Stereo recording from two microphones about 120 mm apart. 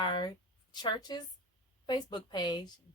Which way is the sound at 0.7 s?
35° left (ahead or behind).